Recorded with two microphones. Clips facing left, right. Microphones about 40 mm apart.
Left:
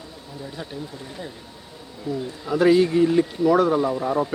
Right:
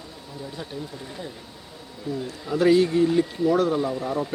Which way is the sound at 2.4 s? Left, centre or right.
Centre.